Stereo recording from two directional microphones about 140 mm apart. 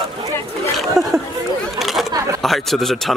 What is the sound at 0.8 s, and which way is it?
Speech, centre (ahead or behind).